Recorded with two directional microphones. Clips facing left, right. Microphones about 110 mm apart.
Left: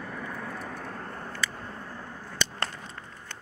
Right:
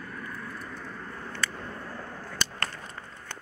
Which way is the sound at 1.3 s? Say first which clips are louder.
Right 2 dB; 10° left (ahead or behind).